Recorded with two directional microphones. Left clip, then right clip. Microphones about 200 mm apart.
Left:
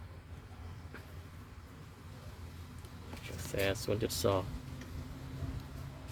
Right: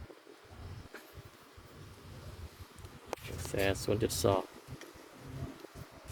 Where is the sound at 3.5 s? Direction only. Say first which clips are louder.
Right 2 dB; 5° right (ahead or behind).